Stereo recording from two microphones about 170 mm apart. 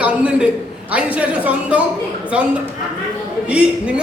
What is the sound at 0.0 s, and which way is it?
A man's voice, 5° right (ahead or behind).